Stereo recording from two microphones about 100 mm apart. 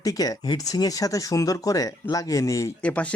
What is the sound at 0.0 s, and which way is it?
Speech, 40° left (ahead or behind).